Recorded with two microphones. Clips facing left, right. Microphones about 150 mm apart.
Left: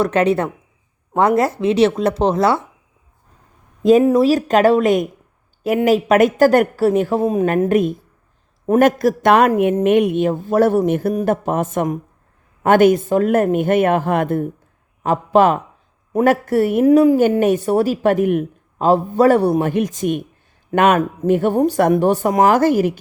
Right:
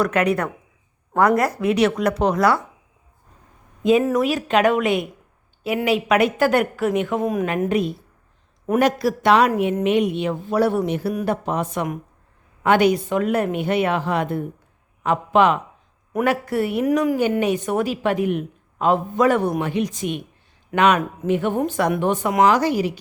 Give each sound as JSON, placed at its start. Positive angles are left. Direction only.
{"t": 0.0, "sound": "speech", "side_deg": 30}
{"t": 4.0, "sound": "speech", "side_deg": 25}
{"t": 4.3, "sound": "speech", "side_deg": 40}
{"t": 7.7, "sound": "speech", "side_deg": 50}
{"t": 15.0, "sound": "speech", "side_deg": 40}
{"t": 16.8, "sound": "speech", "side_deg": 30}
{"t": 17.4, "sound": "speech", "side_deg": 45}
{"t": 18.8, "sound": "speech", "side_deg": 35}